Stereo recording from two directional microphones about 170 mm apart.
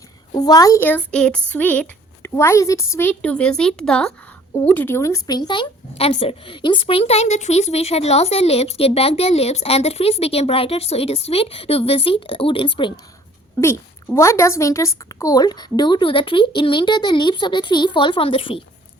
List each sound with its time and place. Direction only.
0.3 s speech: 20° left (ahead or behind)
13.6 s a woman's voice: 15° left (ahead or behind); by 18.6 s 30° left (ahead or behind)